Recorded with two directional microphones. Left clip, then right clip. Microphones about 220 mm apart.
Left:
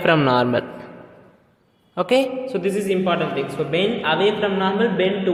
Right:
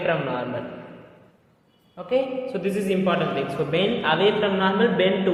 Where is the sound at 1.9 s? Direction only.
50° left (ahead or behind).